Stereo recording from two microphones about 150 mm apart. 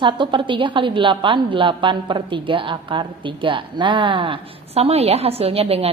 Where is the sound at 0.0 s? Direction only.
35° right (ahead or behind).